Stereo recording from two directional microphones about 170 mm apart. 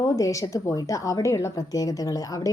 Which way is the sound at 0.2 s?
20° left (ahead or behind).